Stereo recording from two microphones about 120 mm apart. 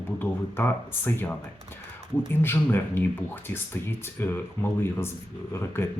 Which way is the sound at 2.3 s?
20° left (ahead or behind).